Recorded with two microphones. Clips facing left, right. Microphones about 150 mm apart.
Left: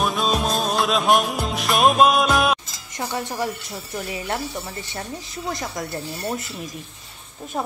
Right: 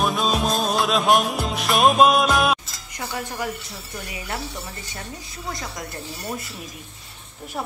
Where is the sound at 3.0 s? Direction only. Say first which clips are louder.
Left 3 dB; 25° left (ahead or behind).